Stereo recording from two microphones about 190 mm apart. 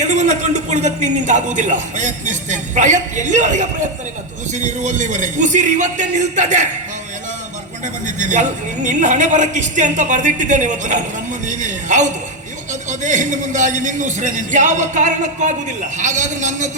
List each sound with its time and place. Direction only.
0.0 s a man's voice: 40° right (ahead or behind)
8.0 s a man's voice: 40° right (ahead or behind)